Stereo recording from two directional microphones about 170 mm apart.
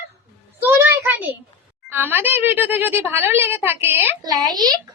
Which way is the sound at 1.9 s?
10° right (ahead or behind).